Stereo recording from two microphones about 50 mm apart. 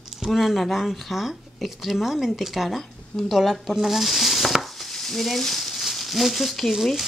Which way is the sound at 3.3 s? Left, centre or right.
Centre.